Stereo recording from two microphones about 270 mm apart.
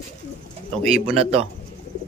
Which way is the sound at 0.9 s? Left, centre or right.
Right.